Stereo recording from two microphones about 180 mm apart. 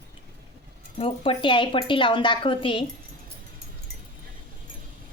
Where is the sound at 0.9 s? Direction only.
30° left (ahead or behind).